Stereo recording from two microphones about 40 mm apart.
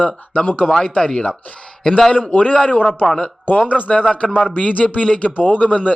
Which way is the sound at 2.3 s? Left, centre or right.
Left.